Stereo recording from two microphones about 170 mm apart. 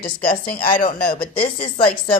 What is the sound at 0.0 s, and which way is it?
A woman's voice, 55° left (ahead or behind).